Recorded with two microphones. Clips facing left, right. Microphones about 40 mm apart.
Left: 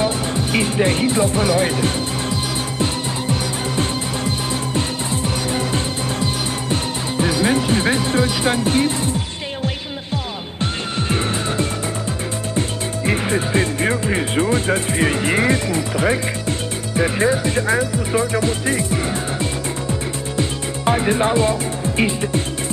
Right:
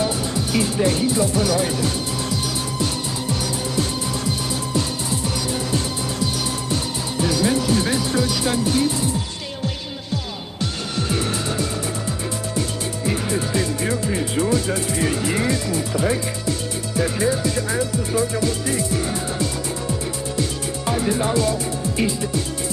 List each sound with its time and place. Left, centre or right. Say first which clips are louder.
0.0 s speech: left 3 dB; left
2.8 s music: left 4 dB; left
10.6 s music: left 2 dB; left
12.5 s speech: left 2 dB; left
20.3 s music: left 4 dB; left